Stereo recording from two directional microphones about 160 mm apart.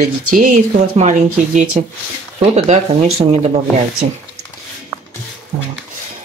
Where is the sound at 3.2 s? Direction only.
30° right (ahead or behind).